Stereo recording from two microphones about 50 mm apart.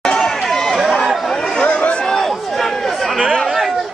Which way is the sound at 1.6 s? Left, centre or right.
Left.